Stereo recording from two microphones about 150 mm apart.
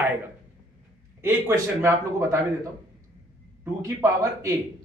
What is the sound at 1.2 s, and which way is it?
Speech, 15° right (ahead or behind).